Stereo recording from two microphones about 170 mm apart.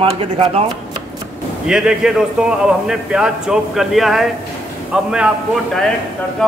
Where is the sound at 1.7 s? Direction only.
5° right (ahead or behind).